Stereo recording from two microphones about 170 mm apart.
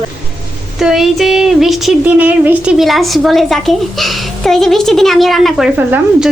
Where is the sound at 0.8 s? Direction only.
Centre (ahead or behind).